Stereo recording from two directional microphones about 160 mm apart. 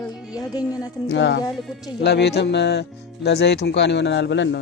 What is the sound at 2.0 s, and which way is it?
Speech, 90° left.